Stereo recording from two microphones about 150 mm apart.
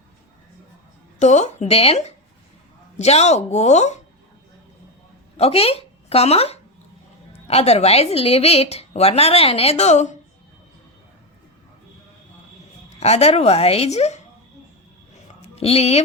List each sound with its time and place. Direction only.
1.2 s a woman's voice: 50° left (ahead or behind)
5.4 s a woman's voice: 40° left (ahead or behind)
13.0 s a woman's voice: 45° left (ahead or behind)
15.1 s a sound: 45° left (ahead or behind)